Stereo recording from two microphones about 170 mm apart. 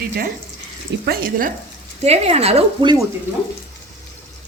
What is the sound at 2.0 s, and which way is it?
Speech, 40° right (ahead or behind).